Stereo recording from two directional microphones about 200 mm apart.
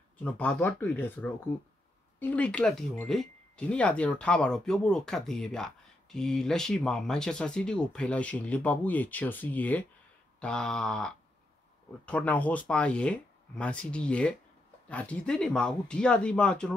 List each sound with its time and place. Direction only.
0.2 s speech: 10° left (ahead or behind)